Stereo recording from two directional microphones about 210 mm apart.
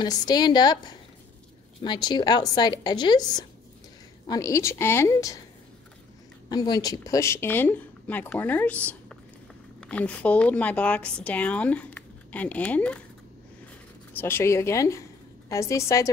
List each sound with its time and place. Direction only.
0.0 s a woman's voice: 20° left (ahead or behind)
6.5 s speech: 20° left (ahead or behind)
14.1 s speech: 10° left (ahead or behind)